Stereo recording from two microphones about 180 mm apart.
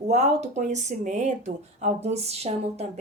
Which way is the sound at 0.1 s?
40° right (ahead or behind).